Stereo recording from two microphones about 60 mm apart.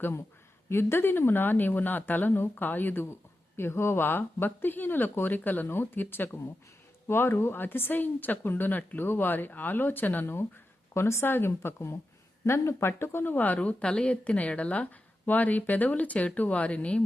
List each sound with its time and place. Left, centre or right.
0.7 s speech: left
10.9 s a woman's voice: left